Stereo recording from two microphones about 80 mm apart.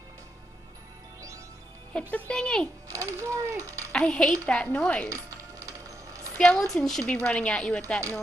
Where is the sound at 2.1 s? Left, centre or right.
Centre.